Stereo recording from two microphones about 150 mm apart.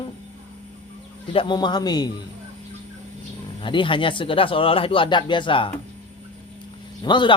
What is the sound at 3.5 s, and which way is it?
Speech, 35° left (ahead or behind).